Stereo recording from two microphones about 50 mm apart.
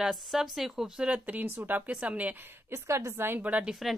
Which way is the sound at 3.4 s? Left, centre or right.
Right.